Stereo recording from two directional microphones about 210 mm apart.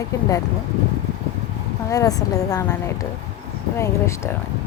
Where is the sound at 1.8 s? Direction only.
15° left (ahead or behind).